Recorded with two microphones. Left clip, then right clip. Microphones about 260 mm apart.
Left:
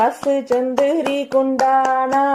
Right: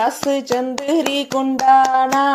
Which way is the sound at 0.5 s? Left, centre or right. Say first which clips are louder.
Left 2 dB; right.